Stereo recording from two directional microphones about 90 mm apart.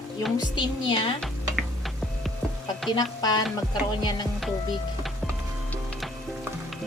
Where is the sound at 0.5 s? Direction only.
75° left (ahead or behind).